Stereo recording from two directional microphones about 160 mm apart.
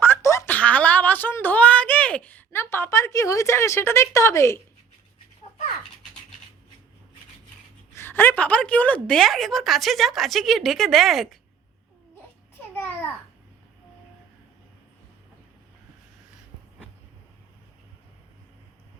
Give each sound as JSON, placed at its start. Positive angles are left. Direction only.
{"t": 0.0, "sound": "a sound", "side_deg": 15}
{"t": 7.9, "sound": "a woman's voice", "side_deg": 15}
{"t": 12.7, "sound": "babbling", "side_deg": 15}